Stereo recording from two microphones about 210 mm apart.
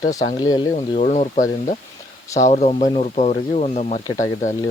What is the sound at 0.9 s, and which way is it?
Speech, 35° left (ahead or behind).